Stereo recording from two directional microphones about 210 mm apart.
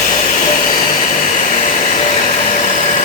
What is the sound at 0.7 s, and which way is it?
Vacuum cleaner, 35° left (ahead or behind).